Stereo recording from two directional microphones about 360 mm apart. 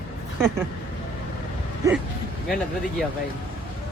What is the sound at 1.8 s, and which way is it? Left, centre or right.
Speech, centre.